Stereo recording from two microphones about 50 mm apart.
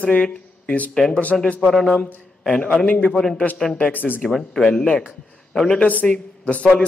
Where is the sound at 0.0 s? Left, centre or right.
Left.